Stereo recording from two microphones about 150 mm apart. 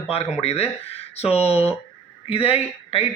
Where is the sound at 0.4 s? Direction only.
40° left (ahead or behind).